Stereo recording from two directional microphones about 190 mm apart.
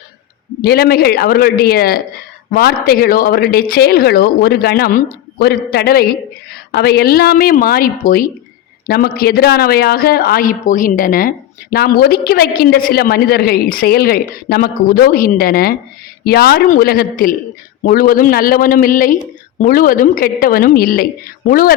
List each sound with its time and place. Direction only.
0.6 s a woman's voice: 55° left (ahead or behind)